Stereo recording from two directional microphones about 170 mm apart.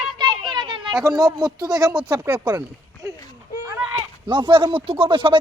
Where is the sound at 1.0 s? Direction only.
20° right (ahead or behind).